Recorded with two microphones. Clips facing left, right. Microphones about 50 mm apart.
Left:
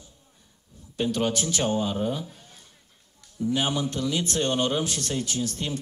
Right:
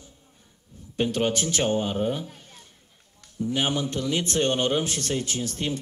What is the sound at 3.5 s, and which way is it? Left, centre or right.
Speech, right.